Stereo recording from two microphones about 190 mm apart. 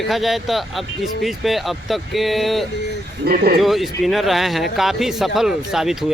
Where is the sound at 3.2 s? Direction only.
55° right (ahead or behind).